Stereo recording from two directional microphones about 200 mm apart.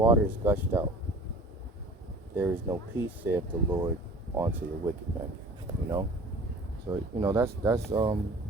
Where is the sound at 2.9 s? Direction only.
10° right (ahead or behind).